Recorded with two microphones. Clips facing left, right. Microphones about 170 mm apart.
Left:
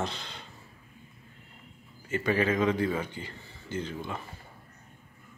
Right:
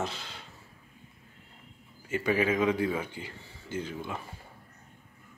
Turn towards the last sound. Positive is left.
turn(degrees=-5)  # may be behind; listen again after turning